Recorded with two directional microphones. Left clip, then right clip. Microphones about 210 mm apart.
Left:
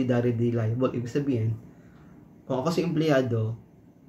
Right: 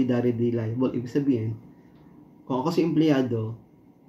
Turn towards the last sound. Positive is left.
turn(degrees=5)  # may be behind; listen again after turning